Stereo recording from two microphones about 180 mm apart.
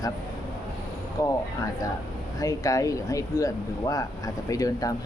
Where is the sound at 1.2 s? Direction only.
20° left (ahead or behind).